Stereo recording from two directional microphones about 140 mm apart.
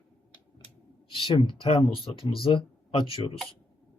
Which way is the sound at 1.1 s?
35° left (ahead or behind).